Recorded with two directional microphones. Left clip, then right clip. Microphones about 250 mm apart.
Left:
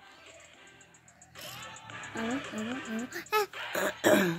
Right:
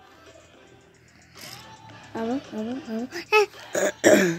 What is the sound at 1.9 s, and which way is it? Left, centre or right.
Speech, left.